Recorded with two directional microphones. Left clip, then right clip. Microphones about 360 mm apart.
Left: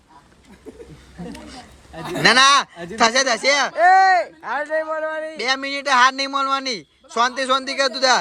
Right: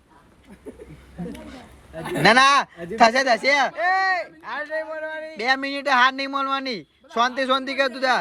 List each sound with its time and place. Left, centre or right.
2.2 s a man's voice: centre
3.8 s a sound: left
5.4 s a man's voice: centre